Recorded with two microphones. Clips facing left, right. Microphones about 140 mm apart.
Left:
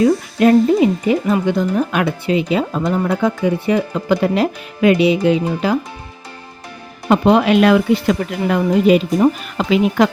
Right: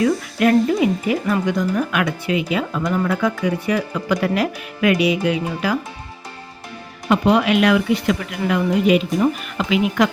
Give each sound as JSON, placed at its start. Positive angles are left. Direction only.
{"t": 0.0, "sound": "speech", "side_deg": 25}
{"t": 7.1, "sound": "speech", "side_deg": 30}